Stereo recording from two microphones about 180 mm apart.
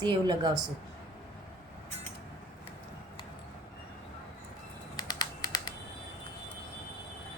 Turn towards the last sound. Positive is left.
turn(degrees=25)  # may be behind; listen again after turning